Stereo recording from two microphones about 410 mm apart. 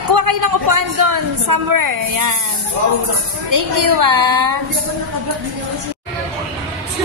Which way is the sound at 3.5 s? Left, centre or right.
Right.